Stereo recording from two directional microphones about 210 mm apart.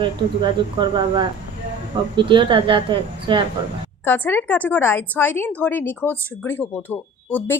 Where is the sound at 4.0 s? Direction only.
10° left (ahead or behind).